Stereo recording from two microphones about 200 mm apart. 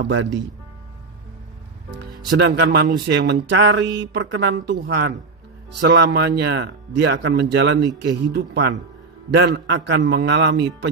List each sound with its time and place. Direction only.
0.0 s speech: 65° right (ahead or behind)
2.4 s speech: 55° right (ahead or behind)
3.3 s speech: 60° right (ahead or behind)